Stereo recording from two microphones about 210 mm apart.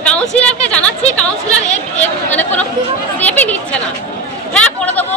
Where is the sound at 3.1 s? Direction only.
5° left (ahead or behind).